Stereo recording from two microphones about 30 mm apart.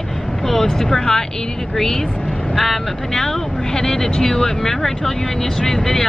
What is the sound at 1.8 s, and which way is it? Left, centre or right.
Speech, centre.